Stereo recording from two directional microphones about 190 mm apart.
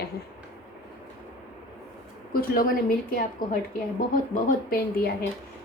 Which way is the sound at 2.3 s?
50° left (ahead or behind).